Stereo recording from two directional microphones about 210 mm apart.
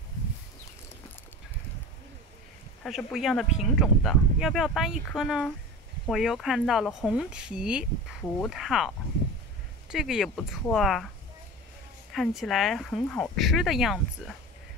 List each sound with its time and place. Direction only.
2.8 s speech: centre (ahead or behind)
12.1 s speech: centre (ahead or behind)